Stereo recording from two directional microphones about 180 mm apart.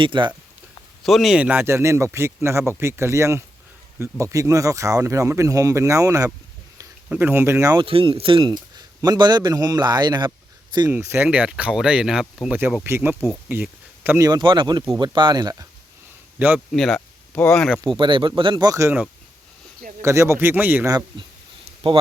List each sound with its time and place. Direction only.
0.0 s a man's voice: 25° right (ahead or behind)
1.0 s speech: centre (ahead or behind); by 7.9 s 15° right (ahead or behind)
7.9 s a man's voice: 30° right (ahead or behind)
10.9 s speech: 10° right (ahead or behind)
13.1 s speech: 5° left (ahead or behind)
13.5 s a sound: 10° right (ahead or behind)
14.3 s a man's voice: 25° right (ahead or behind)
16.4 s speech: 10° right (ahead or behind)
16.7 s speech: 5° left (ahead or behind)
17.8 s a man's voice: 30° right (ahead or behind); by 20.9 s 10° right (ahead or behind)